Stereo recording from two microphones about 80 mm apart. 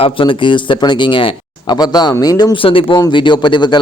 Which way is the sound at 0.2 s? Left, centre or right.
Left.